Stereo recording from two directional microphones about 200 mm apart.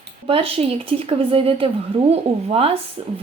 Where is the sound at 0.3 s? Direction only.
30° right (ahead or behind).